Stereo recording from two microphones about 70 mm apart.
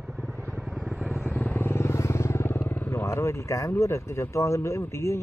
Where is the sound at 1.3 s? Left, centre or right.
Left.